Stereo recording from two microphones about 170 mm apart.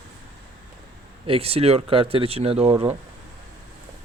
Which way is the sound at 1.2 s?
35° right (ahead or behind).